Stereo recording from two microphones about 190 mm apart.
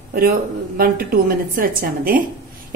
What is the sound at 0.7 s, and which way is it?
A woman's voice, 50° right (ahead or behind).